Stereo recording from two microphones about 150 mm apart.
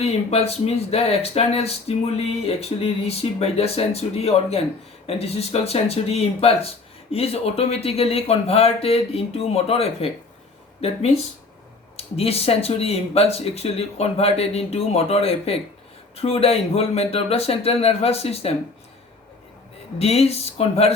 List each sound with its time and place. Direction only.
0.0 s speech: 45° left (ahead or behind)
20.0 s speech: 45° left (ahead or behind)